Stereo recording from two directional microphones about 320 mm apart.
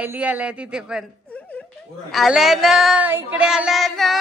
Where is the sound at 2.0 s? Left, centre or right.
Centre.